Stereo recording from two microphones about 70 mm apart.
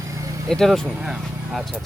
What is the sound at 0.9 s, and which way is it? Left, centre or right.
Speech, centre.